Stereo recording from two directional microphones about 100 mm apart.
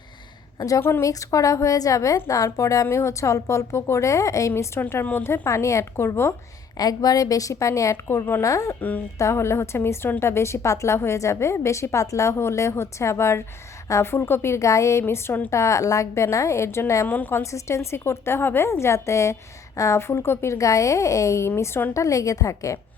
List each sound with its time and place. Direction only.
0.8 s a woman's voice: 25° left (ahead or behind)
6.7 s a woman's voice: 40° left (ahead or behind)
17.1 s a woman's voice: 20° left (ahead or behind)
17.4 s a woman's voice: 30° left (ahead or behind)
21.9 s a woman's voice: 35° left (ahead or behind)